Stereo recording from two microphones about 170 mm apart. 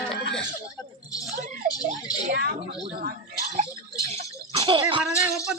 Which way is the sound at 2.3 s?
60° right (ahead or behind).